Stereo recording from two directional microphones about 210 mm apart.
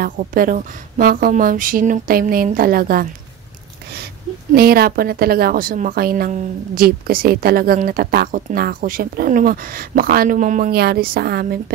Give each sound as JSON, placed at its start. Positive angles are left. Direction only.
{"t": 0.0, "sound": "a woman's voice", "side_deg": -40}